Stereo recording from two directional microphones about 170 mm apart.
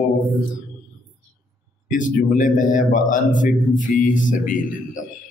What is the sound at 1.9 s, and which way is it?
A man's voice, 50° left (ahead or behind).